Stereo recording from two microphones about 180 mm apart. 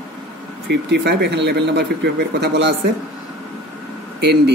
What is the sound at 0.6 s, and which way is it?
Speech, 70° right (ahead or behind).